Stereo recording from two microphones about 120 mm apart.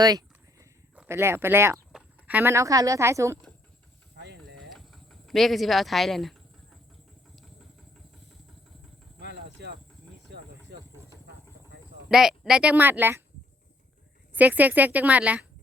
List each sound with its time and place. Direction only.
0.0 s a sound: 35° right (ahead or behind)
1.0 s speech: 20° right (ahead or behind)
1.9 s speech: 10° right (ahead or behind)
4.7 s a sound: centre (ahead or behind)
12.0 s speech: 5° right (ahead or behind)
14.3 s speech: 15° right (ahead or behind)